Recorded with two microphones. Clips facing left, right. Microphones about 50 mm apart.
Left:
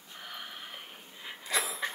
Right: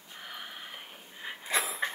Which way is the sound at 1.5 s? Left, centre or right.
Right.